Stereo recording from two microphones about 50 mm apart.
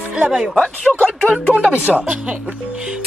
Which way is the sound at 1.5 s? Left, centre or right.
Right.